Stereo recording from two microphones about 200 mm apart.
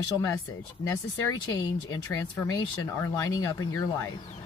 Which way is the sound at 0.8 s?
15° left (ahead or behind).